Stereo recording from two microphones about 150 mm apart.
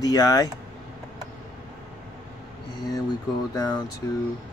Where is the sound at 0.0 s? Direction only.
25° left (ahead or behind).